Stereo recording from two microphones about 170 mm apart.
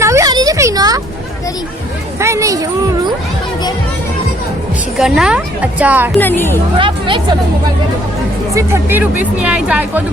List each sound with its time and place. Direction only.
0.0 s a sound: 20° right (ahead or behind)
2.1 s speech: 15° right (ahead or behind)
4.9 s speech: centre (ahead or behind)
6.1 s speech: 10° left (ahead or behind)
6.7 s speech: 30° right (ahead or behind)
8.5 s speech: 15° right (ahead or behind)